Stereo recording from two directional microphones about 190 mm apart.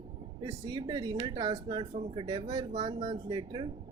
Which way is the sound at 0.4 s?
20° right (ahead or behind).